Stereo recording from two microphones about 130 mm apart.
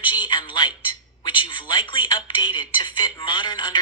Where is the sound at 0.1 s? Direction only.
35° left (ahead or behind).